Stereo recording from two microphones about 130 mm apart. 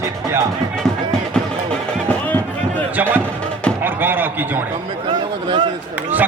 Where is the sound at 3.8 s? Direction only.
15° right (ahead or behind).